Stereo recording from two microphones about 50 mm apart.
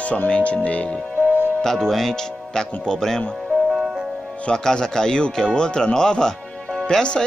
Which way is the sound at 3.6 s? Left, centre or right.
Centre.